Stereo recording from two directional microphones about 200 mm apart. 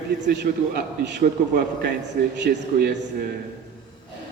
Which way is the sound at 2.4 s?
55° right (ahead or behind).